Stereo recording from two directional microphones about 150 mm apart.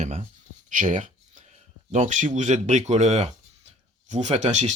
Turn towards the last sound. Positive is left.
turn(degrees=-50)  # may be behind; listen again after turning